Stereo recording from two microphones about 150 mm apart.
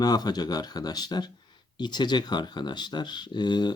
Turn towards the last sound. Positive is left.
turn(degrees=30)  # may be behind; listen again after turning